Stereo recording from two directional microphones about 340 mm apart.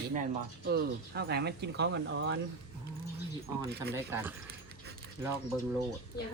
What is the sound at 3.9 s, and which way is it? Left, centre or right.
Speech, centre.